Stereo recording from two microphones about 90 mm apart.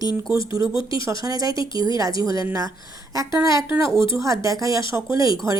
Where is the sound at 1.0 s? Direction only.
40° right (ahead or behind).